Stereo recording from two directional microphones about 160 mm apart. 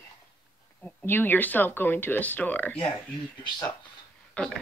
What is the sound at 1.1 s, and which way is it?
Speech, 10° left (ahead or behind).